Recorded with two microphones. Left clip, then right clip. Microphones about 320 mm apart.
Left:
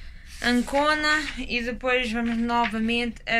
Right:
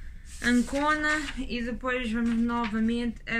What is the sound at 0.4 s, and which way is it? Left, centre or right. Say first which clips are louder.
Speech: left 4 dB; centre.